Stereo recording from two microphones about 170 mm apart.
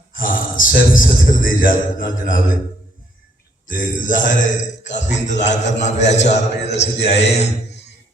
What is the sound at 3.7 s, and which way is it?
A man's voice, 50° left (ahead or behind).